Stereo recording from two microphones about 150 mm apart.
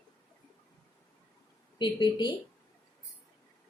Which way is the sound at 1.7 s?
30° left (ahead or behind).